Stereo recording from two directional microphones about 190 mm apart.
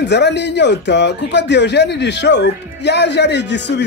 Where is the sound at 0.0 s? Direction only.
65° left (ahead or behind).